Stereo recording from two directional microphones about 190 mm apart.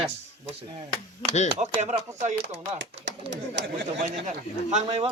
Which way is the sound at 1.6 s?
35° right (ahead or behind).